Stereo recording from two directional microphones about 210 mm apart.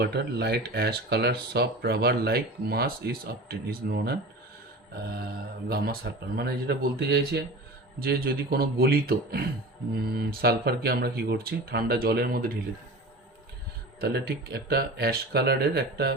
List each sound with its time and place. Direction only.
0.0 s speech: 50° right (ahead or behind)
5.6 s speech: 45° right (ahead or behind)
14.0 s speech: 50° right (ahead or behind)